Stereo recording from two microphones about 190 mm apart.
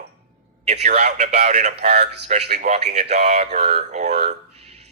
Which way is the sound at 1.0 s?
35° right (ahead or behind).